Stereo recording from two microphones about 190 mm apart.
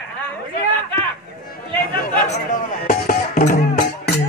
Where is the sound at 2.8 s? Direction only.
45° left (ahead or behind).